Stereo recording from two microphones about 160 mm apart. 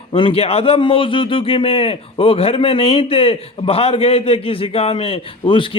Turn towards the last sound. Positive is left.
turn(degrees=30)  # may be behind; listen again after turning